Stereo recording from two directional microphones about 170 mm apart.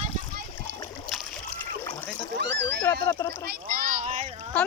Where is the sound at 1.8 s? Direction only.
15° left (ahead or behind).